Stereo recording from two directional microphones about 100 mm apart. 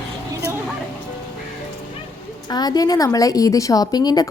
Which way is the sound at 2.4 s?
45° left (ahead or behind).